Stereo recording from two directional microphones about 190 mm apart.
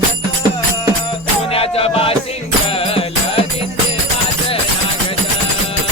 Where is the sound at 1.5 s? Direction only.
30° left (ahead or behind).